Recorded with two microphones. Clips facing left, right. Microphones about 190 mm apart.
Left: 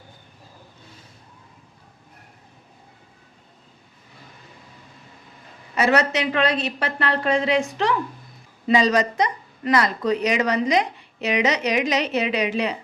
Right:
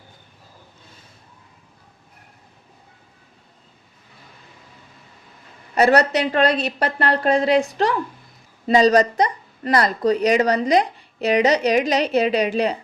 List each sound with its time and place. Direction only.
5.7 s speech: 35° right (ahead or behind)